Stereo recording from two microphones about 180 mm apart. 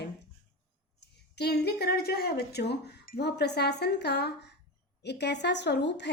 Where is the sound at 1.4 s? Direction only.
65° left (ahead or behind).